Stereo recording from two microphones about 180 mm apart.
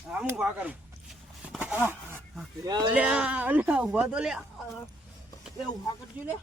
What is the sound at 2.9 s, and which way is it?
A woman's voice, 5° right (ahead or behind).